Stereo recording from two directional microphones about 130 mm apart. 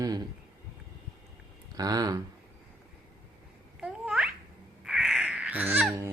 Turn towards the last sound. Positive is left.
turn(degrees=-10)  # may be behind; listen again after turning